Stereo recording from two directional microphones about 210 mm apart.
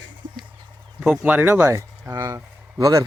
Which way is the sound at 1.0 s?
5° right (ahead or behind).